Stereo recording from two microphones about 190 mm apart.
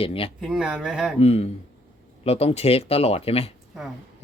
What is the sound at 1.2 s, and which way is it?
Speech, 30° left (ahead or behind).